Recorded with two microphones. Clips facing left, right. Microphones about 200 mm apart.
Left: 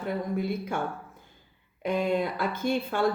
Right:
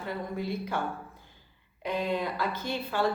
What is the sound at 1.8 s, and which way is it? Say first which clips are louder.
Speech: left 4 dB; 50° left (ahead or behind).